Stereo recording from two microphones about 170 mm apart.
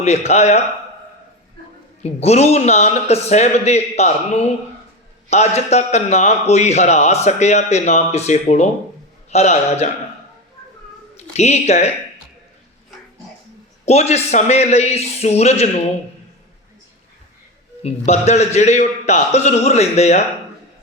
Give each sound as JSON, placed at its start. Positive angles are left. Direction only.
{"t": 0.0, "sound": "a man's voice", "side_deg": 40}
{"t": 2.0, "sound": "a man's voice", "side_deg": 40}
{"t": 5.3, "sound": "a man's voice", "side_deg": 40}
{"t": 11.3, "sound": "a man's voice", "side_deg": 40}
{"t": 13.8, "sound": "a man's voice", "side_deg": 40}
{"t": 17.8, "sound": "a man's voice", "side_deg": 40}